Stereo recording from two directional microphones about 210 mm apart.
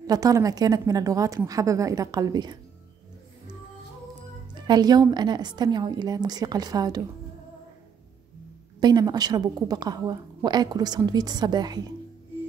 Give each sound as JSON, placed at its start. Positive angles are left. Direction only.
{"t": 0.0, "sound": "a woman's voice", "side_deg": -15}
{"t": 4.6, "sound": "a woman's voice", "side_deg": -20}
{"t": 8.7, "sound": "a woman's voice", "side_deg": -20}